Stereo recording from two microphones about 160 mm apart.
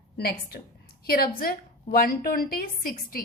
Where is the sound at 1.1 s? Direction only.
65° left (ahead or behind).